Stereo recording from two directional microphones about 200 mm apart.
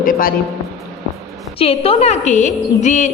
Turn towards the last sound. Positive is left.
turn(degrees=40)  # may be behind; listen again after turning